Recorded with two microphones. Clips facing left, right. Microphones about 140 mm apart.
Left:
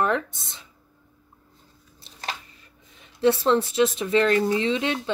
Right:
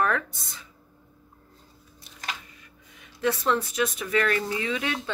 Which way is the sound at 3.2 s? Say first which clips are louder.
Left 5 dB; 30° left (ahead or behind).